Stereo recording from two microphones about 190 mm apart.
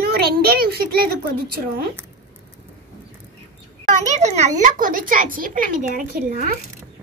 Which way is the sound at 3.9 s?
40° right (ahead or behind).